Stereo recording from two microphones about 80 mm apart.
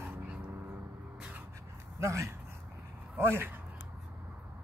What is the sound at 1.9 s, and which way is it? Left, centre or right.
Speech, right.